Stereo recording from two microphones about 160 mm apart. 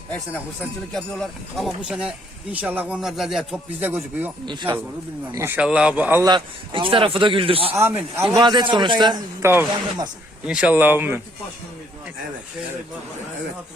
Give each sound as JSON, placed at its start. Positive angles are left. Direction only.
{"t": 0.9, "sound": "speech", "side_deg": 0}
{"t": 6.2, "sound": "a man's voice", "side_deg": -30}
{"t": 7.8, "sound": "speech", "side_deg": -15}
{"t": 8.4, "sound": "a man's voice", "side_deg": -30}
{"t": 9.4, "sound": "speech", "side_deg": -15}